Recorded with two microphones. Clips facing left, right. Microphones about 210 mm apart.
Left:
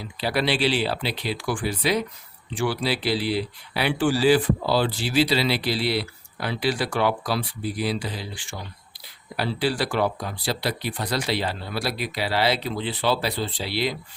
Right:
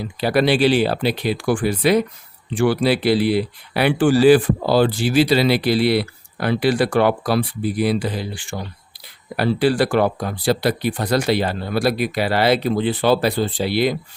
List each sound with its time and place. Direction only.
0.2 s speech: 50° right (ahead or behind)